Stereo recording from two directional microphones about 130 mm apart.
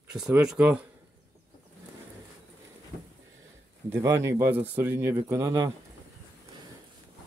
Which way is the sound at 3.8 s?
20° right (ahead or behind).